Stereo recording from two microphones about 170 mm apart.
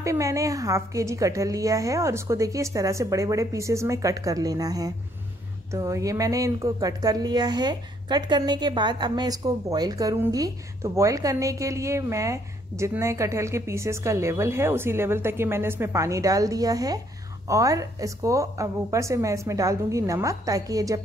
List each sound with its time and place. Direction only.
0.0 s a woman's voice: 20° right (ahead or behind)